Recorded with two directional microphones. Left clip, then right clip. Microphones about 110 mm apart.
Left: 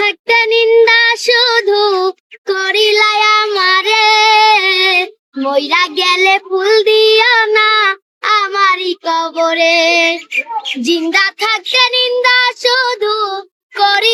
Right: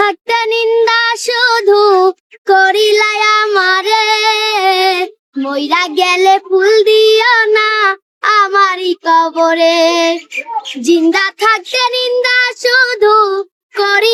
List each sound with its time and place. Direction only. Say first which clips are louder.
0.0 s child singing: left 1 dB; 40° right (ahead or behind)